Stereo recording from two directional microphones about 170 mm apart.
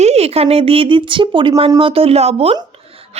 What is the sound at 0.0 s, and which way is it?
Speech, 40° right (ahead or behind).